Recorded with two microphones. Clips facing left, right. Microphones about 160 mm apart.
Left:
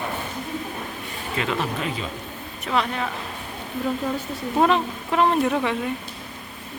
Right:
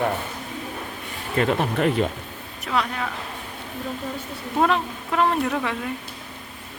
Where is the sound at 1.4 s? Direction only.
50° right (ahead or behind).